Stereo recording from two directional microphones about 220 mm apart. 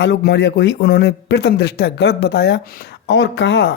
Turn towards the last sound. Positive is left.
turn(degrees=50)  # may be behind; listen again after turning